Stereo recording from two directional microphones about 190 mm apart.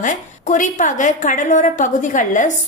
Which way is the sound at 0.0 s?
40° left (ahead or behind).